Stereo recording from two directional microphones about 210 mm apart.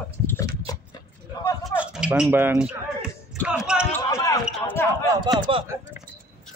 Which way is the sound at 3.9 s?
15° left (ahead or behind).